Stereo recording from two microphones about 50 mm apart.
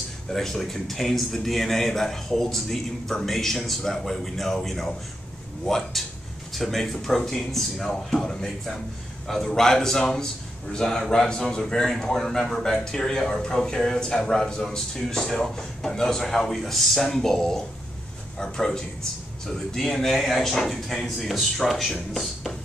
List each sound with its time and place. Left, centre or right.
0.3 s a man's voice: centre